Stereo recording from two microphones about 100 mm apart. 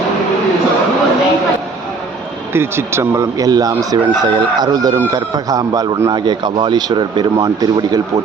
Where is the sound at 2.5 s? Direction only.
25° right (ahead or behind).